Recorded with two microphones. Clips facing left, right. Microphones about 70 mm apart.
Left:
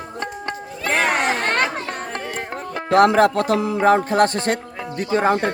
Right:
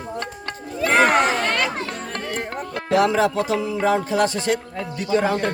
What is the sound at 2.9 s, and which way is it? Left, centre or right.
Music, left.